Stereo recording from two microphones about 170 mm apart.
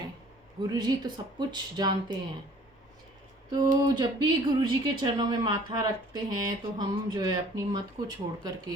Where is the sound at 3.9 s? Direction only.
25° right (ahead or behind).